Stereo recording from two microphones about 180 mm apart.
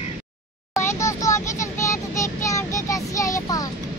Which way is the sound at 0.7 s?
15° left (ahead or behind).